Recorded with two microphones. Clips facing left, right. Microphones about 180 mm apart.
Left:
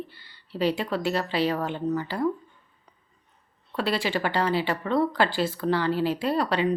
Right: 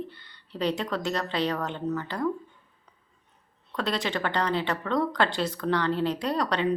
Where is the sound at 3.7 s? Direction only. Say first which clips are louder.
Left 3 dB; 5° left (ahead or behind).